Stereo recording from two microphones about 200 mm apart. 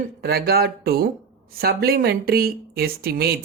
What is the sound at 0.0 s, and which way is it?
Speech, 50° right (ahead or behind).